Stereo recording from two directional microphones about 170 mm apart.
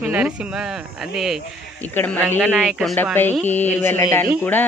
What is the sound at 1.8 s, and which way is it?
Speech, 10° left (ahead or behind).